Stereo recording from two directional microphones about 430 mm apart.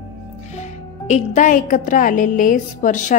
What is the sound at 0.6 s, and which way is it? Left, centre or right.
A woman's voice, centre.